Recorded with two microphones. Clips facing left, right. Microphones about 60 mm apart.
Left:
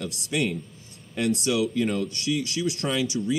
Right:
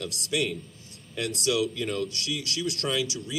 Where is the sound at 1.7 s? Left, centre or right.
Left.